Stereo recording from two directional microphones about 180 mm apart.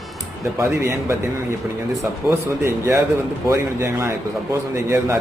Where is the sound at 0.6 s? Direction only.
15° right (ahead or behind).